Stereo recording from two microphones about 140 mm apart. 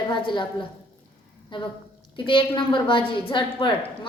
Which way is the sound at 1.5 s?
35° left (ahead or behind).